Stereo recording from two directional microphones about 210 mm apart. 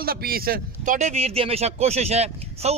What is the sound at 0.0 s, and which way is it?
A man's voice, 45° right (ahead or behind).